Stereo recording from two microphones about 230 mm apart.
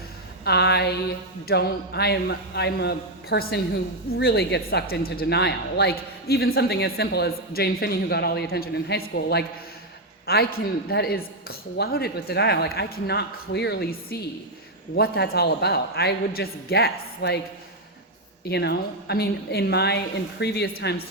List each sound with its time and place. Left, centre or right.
0.4 s a sound: left
1.5 s speech: left
18.4 s speech: left